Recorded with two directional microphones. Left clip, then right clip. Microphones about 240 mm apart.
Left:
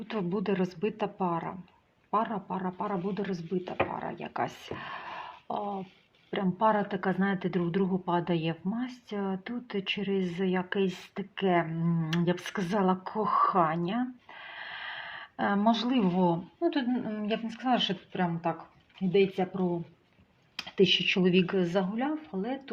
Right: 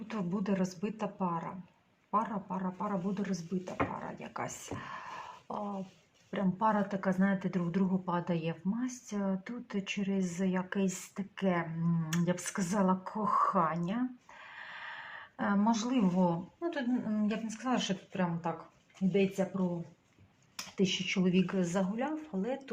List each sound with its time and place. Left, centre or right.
0.1 s speech: left
20.7 s speech: left